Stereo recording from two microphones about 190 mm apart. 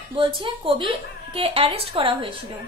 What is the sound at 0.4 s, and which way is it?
A woman's voice, 25° right (ahead or behind).